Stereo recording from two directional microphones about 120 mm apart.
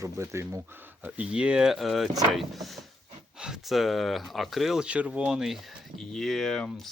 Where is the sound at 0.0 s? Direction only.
25° right (ahead or behind).